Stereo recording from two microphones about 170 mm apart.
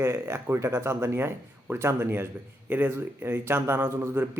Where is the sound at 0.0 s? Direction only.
15° right (ahead or behind).